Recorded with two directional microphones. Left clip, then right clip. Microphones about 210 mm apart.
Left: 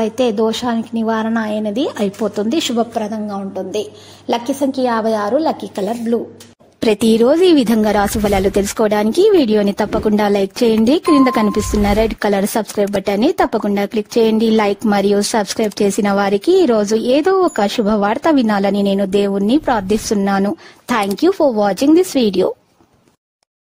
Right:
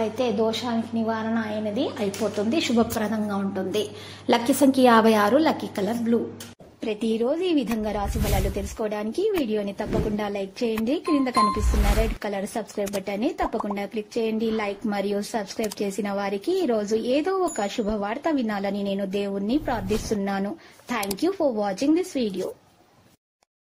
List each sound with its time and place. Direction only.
0.0 s speech: 45° left (ahead or behind)
2.7 s a woman's voice: 10° left (ahead or behind)
4.3 s a woman's voice: centre (ahead or behind)
5.6 s a woman's voice: 25° left (ahead or behind)
6.8 s speech: 60° left (ahead or behind)